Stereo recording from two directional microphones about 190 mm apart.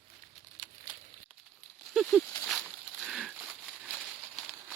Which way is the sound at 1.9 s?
Centre (ahead or behind).